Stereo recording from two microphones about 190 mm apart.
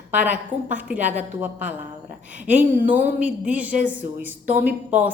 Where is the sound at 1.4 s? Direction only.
10° right (ahead or behind).